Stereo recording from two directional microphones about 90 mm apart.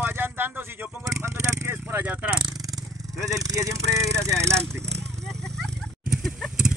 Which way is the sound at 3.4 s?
35° right (ahead or behind).